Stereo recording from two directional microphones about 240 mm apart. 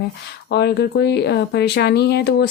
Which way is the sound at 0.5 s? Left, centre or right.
Left.